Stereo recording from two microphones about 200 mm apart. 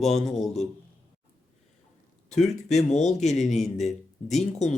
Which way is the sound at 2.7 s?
35° left (ahead or behind).